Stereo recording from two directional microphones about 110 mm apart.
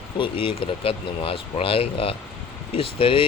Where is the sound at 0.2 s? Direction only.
55° left (ahead or behind).